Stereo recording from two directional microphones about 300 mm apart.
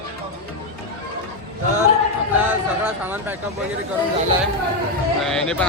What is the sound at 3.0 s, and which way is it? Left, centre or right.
Speech, centre.